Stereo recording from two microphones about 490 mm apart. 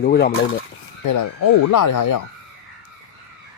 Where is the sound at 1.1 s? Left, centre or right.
Left.